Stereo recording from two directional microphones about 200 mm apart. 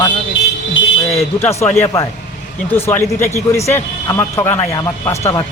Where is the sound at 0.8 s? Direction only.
70° left (ahead or behind).